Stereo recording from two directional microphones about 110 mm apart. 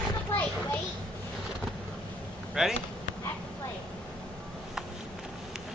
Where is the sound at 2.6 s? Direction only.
5° right (ahead or behind).